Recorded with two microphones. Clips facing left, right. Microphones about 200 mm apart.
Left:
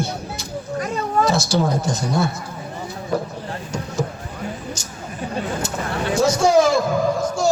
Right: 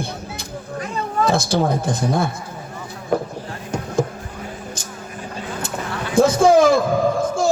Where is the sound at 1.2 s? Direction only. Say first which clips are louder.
Right 1 dB; 55° right (ahead or behind).